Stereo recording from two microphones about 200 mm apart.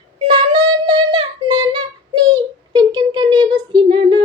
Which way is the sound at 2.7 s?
20° right (ahead or behind).